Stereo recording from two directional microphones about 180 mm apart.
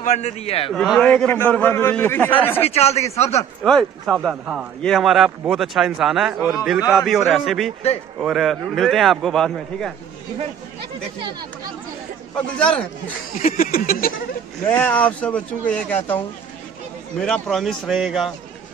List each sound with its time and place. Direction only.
0.0 s speech: 40° left (ahead or behind)
0.7 s a man's voice: 5° left (ahead or behind)
2.6 s speech: 35° left (ahead or behind)
3.6 s speech: centre (ahead or behind)
12.4 s speech: 5° left (ahead or behind)
13.4 s a sound: 50° left (ahead or behind)
14.7 s a man's voice: 10° left (ahead or behind)
17.2 s speech: centre (ahead or behind)